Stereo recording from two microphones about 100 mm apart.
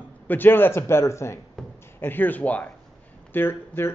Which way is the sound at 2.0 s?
20° left (ahead or behind).